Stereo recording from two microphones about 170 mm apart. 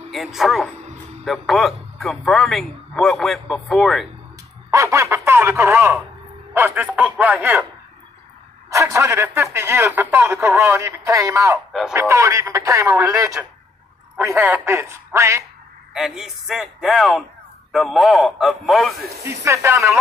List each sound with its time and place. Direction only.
0.1 s a man's voice: centre (ahead or behind)
4.6 s a man's voice: 15° right (ahead or behind)
8.6 s a man's voice: 20° right (ahead or behind)
15.9 s a man's voice: centre (ahead or behind)
19.2 s a man's voice: 15° right (ahead or behind)